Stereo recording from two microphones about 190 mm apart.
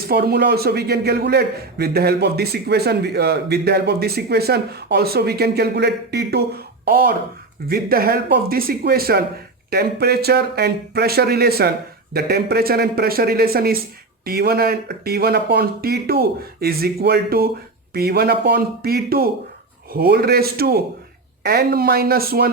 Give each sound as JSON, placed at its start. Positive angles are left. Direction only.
{"t": 0.1, "sound": "a man's voice", "side_deg": -55}